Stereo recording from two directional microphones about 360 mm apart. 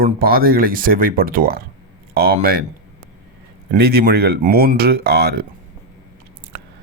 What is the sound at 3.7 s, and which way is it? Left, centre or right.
Speech, right.